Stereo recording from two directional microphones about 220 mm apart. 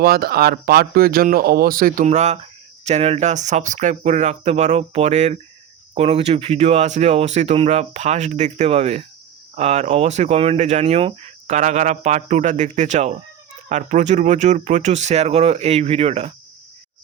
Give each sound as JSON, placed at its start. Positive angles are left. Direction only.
{"t": 0.0, "sound": "speech", "side_deg": -45}